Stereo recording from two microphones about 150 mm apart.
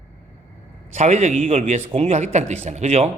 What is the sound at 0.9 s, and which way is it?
A man's voice, 50° right (ahead or behind).